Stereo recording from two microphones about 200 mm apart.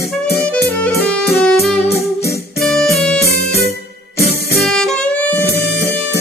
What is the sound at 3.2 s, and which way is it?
Music, 50° left (ahead or behind).